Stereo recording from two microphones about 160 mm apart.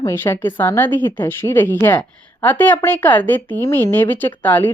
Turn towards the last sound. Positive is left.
turn(degrees=10)  # may be behind; listen again after turning